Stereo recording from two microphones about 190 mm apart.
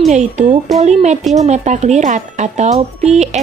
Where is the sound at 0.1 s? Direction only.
40° right (ahead or behind).